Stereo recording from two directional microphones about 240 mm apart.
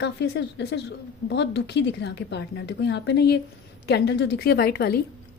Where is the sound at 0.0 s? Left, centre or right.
Left.